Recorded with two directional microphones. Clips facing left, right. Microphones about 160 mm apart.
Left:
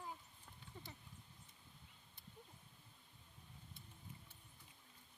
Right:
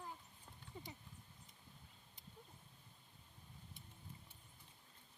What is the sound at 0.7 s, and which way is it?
Horse, 10° right (ahead or behind).